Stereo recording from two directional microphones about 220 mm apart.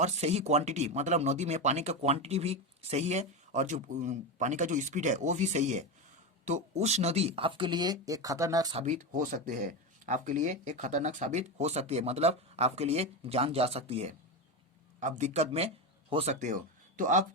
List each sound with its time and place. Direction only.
0.0 s speech: 30° right (ahead or behind)
8.8 s speech: 35° right (ahead or behind)